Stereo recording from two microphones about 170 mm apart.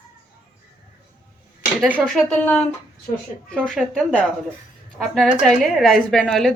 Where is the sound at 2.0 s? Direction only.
Centre (ahead or behind).